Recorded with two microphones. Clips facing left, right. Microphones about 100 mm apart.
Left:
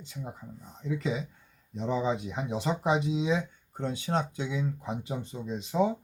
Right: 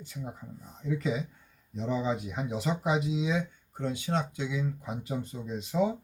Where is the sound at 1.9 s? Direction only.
30° left (ahead or behind).